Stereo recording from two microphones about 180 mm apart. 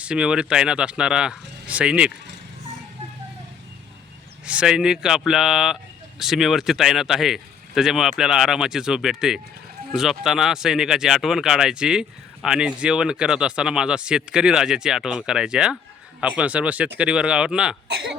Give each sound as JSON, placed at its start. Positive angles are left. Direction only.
{"t": 0.0, "sound": "speech", "side_deg": -5}
{"t": 4.4, "sound": "speech", "side_deg": -5}